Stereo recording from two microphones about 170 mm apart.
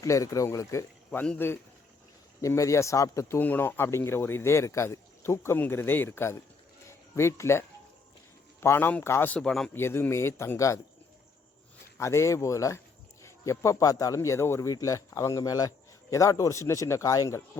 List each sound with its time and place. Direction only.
0.0 s speech: 20° left (ahead or behind)
6.8 s a sound: 15° left (ahead or behind)
8.6 s speech: 10° left (ahead or behind)
9.7 s speech: 15° left (ahead or behind)
11.9 s speech: 15° left (ahead or behind)